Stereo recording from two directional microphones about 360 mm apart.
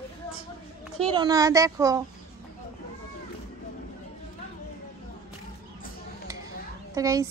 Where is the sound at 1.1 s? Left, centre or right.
Centre.